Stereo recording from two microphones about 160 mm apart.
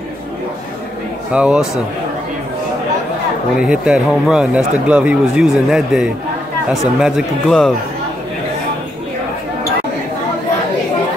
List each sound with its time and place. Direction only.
1.3 s speech: 5° right (ahead or behind)
3.6 s a man's voice: 5° right (ahead or behind)